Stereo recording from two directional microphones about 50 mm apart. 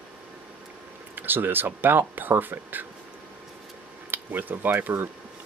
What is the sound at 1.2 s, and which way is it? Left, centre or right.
Speech, right.